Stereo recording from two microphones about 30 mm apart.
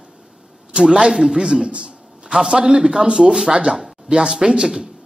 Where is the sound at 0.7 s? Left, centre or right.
Right.